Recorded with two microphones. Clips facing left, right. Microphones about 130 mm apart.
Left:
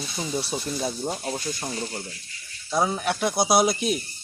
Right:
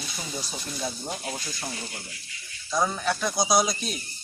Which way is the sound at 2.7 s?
25° left (ahead or behind).